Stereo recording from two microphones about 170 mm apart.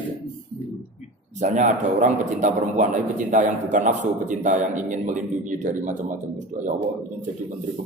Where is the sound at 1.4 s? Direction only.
45° right (ahead or behind).